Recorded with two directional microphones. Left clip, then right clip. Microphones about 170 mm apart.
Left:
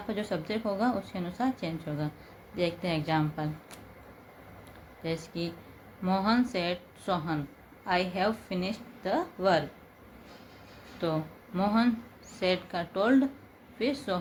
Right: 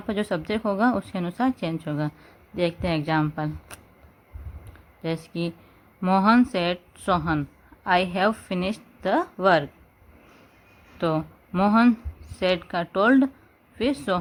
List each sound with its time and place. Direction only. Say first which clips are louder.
0.1 s a woman's voice: right 7 dB; 60° right (ahead or behind)
5.0 s a woman's voice: right 5 dB; 55° right (ahead or behind)
11.0 s a woman's voice: right 6 dB; 60° right (ahead or behind)